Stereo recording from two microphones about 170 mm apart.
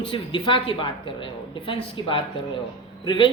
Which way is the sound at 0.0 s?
30° left (ahead or behind).